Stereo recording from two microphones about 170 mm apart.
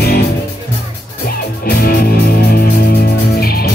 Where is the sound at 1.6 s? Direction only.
60° left (ahead or behind).